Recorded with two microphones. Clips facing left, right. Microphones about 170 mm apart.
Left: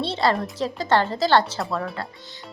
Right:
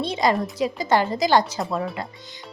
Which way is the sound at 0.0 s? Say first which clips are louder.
Right 1 dB; 15° right (ahead or behind).